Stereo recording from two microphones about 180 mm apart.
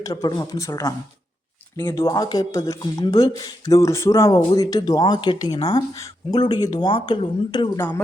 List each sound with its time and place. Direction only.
0.1 s speech: 20° left (ahead or behind)
7.8 s speech: 10° left (ahead or behind)